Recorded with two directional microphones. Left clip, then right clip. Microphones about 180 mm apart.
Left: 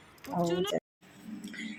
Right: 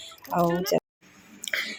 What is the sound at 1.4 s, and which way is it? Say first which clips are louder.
Whispering: right 14 dB; 20° right (ahead or behind).